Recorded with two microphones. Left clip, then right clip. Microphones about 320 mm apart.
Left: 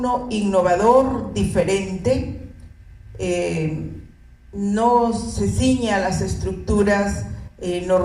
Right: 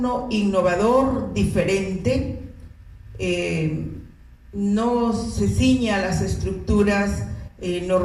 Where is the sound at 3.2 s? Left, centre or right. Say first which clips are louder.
Left 2 dB; left.